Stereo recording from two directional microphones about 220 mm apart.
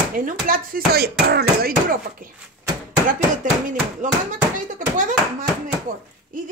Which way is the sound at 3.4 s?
35° right (ahead or behind).